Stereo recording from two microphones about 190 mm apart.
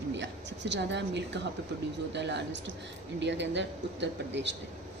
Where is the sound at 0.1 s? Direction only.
65° right (ahead or behind).